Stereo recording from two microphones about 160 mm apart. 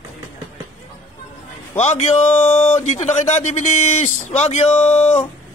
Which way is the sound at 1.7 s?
45° left (ahead or behind).